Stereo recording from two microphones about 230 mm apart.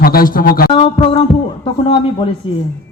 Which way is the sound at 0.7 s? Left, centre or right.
Left.